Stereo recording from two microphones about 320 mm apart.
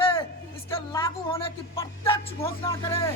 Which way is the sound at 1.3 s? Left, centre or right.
Centre.